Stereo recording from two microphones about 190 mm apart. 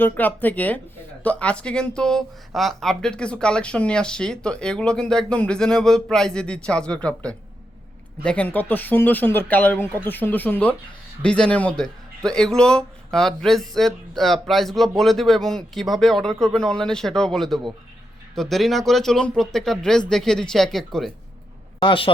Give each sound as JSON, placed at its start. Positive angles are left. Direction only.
{"t": 0.0, "sound": "speech", "side_deg": 10}
{"t": 21.8, "sound": "speech", "side_deg": 25}